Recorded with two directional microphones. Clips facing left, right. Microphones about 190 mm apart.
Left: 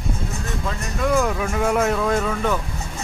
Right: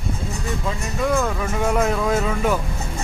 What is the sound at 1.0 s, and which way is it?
Music, 5° left (ahead or behind).